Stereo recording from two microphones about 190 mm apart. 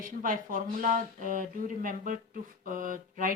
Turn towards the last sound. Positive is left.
turn(degrees=-45)  # may be behind; listen again after turning